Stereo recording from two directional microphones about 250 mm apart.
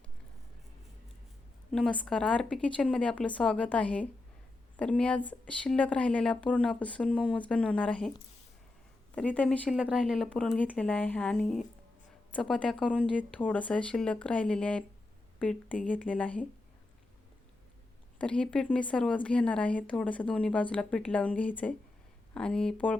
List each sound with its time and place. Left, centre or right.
1.7 s a woman's voice: centre
9.1 s a woman's voice: centre
18.2 s a woman's voice: centre